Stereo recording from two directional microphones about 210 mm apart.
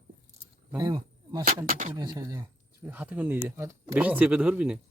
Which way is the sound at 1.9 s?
20° right (ahead or behind).